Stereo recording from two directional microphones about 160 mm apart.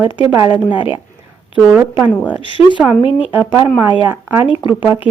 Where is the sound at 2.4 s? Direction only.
30° left (ahead or behind).